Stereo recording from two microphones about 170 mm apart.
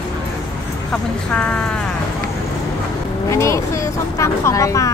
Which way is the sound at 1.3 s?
5° left (ahead or behind).